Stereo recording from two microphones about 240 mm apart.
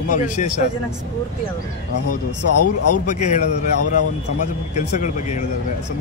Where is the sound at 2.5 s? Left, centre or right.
Left.